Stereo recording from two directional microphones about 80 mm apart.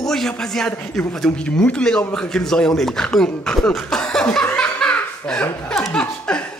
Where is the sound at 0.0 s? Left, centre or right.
Centre.